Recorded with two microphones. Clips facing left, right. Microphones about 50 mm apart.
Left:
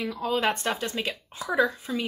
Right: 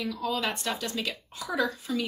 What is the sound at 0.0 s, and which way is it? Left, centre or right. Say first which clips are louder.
Speech: left 4 dB; left.